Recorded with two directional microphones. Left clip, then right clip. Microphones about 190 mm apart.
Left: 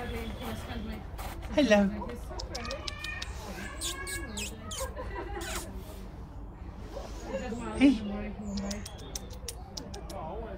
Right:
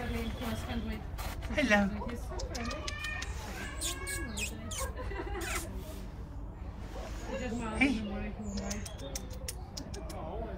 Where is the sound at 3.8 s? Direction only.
15° left (ahead or behind).